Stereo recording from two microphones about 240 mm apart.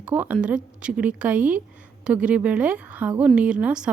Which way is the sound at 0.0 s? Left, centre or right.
Centre.